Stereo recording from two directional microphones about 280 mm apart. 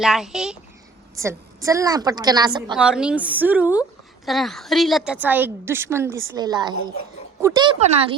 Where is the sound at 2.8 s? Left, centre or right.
Centre.